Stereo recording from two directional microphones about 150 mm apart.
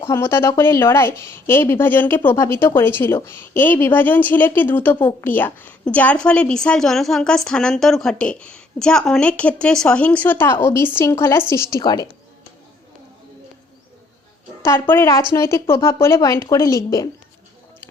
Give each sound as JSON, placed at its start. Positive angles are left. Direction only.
{"t": 0.0, "sound": "a woman's voice", "side_deg": 15}
{"t": 11.8, "sound": "speech", "side_deg": 30}
{"t": 14.6, "sound": "speech", "side_deg": 15}